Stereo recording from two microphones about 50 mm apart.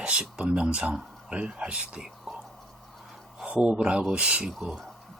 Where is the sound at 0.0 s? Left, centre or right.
Right.